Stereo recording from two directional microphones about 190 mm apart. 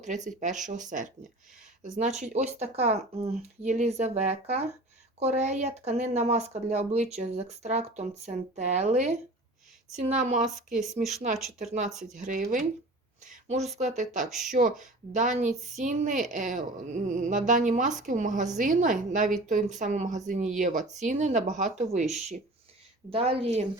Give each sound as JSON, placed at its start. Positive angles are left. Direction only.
{"t": 0.3, "sound": "speech", "side_deg": -40}
{"t": 10.4, "sound": "speech", "side_deg": 0}
{"t": 12.1, "sound": "a woman's voice", "side_deg": -45}